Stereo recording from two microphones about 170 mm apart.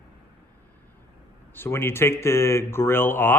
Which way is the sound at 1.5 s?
15° left (ahead or behind).